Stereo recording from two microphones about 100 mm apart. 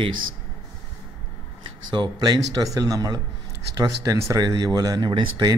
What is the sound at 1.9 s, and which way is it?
Speech, 45° right (ahead or behind).